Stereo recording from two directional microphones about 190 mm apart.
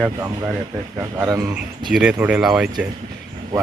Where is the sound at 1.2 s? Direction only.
15° right (ahead or behind).